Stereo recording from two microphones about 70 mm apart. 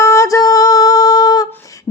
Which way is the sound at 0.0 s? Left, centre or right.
Left.